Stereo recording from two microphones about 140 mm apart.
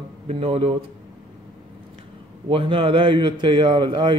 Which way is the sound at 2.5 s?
40° right (ahead or behind).